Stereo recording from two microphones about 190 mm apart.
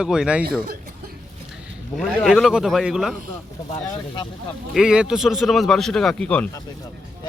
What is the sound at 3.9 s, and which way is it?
Speech, 25° left (ahead or behind).